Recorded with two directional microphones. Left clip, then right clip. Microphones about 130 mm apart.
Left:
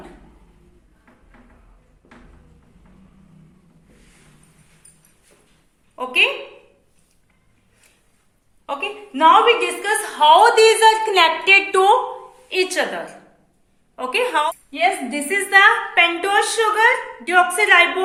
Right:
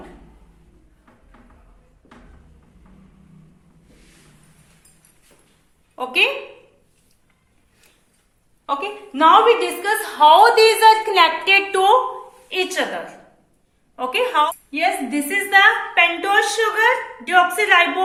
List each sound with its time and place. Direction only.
6.0 s a woman's voice: 35° right (ahead or behind)
8.6 s a woman's voice: 40° right (ahead or behind)
9.8 s a woman's voice: 10° right (ahead or behind); by 11.9 s 10° left (ahead or behind)
12.5 s a woman's voice: 40° left (ahead or behind)
14.8 s a woman's voice: 25° left (ahead or behind)